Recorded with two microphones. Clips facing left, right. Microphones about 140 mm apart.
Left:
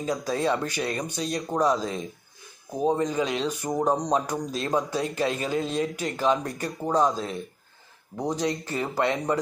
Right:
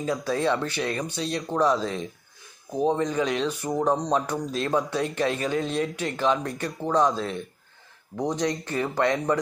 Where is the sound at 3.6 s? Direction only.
15° left (ahead or behind).